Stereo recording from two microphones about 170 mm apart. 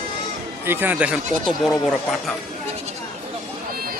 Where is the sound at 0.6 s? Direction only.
10° right (ahead or behind).